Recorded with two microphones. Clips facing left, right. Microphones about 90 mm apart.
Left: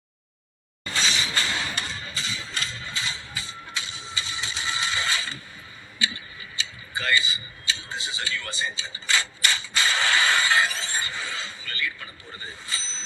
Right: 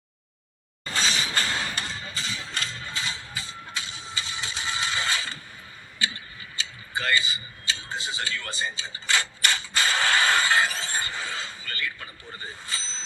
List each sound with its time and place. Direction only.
0.9 s a sound: 45° right (ahead or behind)
6.0 s tick-tock: 45° right (ahead or behind)
12.6 s bicycle bell: 45° right (ahead or behind)